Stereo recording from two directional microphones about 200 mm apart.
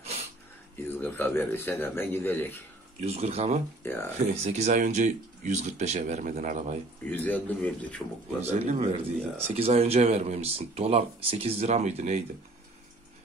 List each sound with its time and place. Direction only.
0.0 s a sound: 30° right (ahead or behind)
0.8 s a man's voice: 10° left (ahead or behind)
3.0 s speech: 30° right (ahead or behind)
3.8 s a man's voice: 10° left (ahead or behind)
4.2 s speech: 35° right (ahead or behind)
7.1 s a man's voice: 10° left (ahead or behind)
8.4 s speech: 30° right (ahead or behind)